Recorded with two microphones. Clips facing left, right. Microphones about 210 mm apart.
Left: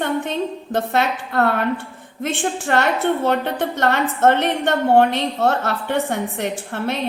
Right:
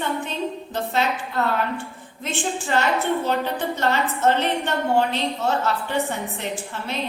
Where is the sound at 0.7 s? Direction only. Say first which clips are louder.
Left 4 dB; 55° left (ahead or behind).